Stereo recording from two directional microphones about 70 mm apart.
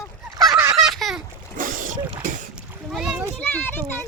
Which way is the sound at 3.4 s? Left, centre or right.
Left.